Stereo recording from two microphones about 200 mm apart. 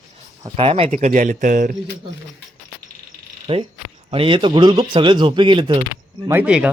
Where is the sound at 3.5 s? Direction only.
30° right (ahead or behind).